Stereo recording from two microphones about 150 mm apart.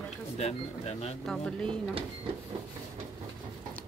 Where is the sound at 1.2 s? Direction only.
5° left (ahead or behind).